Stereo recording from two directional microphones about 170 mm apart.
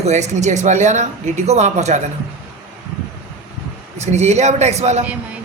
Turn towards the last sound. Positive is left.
turn(degrees=-40)  # may be behind; listen again after turning